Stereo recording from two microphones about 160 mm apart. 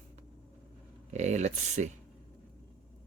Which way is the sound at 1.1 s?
45° right (ahead or behind).